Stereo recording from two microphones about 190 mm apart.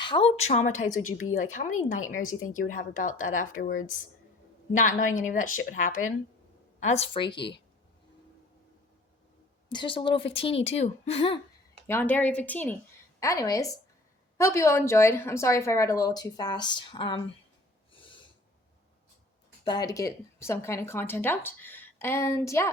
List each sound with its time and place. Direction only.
0.0 s a woman's voice: 30° left (ahead or behind)
9.6 s a woman's voice: 25° left (ahead or behind)
11.9 s speech: 10° left (ahead or behind); by 17.2 s 25° left (ahead or behind)
17.9 s snort: 25° left (ahead or behind)
19.6 s speech: 20° left (ahead or behind)